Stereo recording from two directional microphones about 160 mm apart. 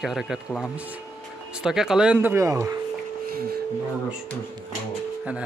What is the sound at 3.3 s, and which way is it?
Speech, 70° right (ahead or behind).